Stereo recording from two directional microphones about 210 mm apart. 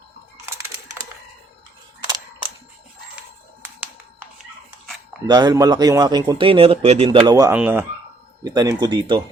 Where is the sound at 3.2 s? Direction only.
10° right (ahead or behind).